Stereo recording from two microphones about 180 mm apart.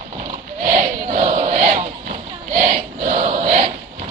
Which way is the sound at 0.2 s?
40° right (ahead or behind).